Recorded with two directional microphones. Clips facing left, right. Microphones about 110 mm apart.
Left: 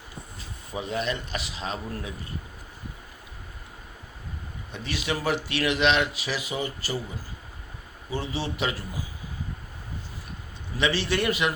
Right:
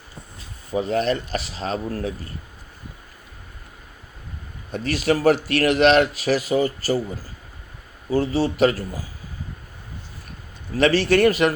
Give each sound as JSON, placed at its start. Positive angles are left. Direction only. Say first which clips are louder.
{"t": 0.8, "sound": "a man's voice", "louder": "right 8 dB", "side_deg": -45}
{"t": 4.7, "sound": "speech", "louder": "right 9 dB", "side_deg": -45}
{"t": 8.1, "sound": "a man's voice", "louder": "right 10 dB", "side_deg": -40}
{"t": 10.8, "sound": "speech", "louder": "right 9 dB", "side_deg": -45}